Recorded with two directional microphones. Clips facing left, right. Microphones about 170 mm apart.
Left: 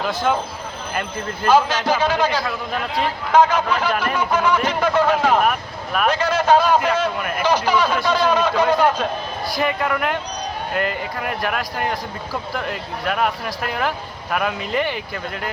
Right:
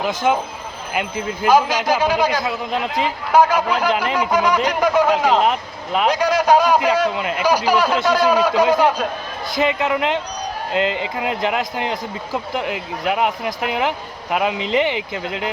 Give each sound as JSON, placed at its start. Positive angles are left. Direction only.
{"t": 0.0, "sound": "a man's voice", "side_deg": -15}
{"t": 9.5, "sound": "speech", "side_deg": -20}